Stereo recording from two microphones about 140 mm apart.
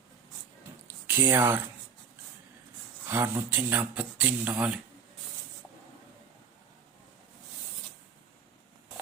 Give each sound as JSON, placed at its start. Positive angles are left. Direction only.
{"t": 1.0, "sound": "speech", "side_deg": -15}
{"t": 3.1, "sound": "speech", "side_deg": -15}